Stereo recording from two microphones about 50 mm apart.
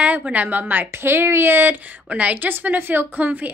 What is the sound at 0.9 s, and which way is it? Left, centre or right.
A woman's voice, right.